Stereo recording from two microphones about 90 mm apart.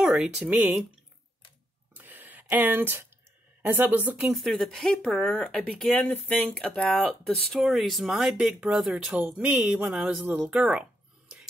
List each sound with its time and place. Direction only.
0.0 s speech: 5° right (ahead or behind)
2.0 s a sound: 20° right (ahead or behind)
3.6 s speech: 20° right (ahead or behind)
4.3 s speech: centre (ahead or behind)
5.9 s speech: 15° left (ahead or behind); by 10.2 s 5° right (ahead or behind)
10.3 s a sound: 10° right (ahead or behind)